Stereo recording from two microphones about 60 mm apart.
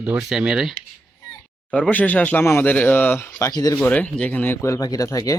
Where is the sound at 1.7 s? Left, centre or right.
Left.